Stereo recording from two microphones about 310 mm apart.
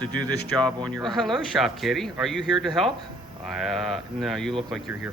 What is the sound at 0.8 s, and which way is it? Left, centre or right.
A man's voice, centre.